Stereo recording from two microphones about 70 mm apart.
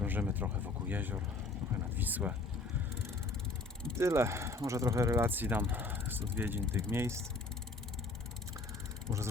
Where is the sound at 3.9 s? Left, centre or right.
Right.